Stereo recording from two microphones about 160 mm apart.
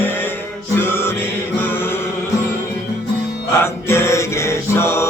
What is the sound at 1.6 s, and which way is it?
Chant, 15° left (ahead or behind).